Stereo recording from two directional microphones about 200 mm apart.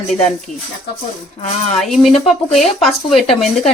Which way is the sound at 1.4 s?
35° left (ahead or behind).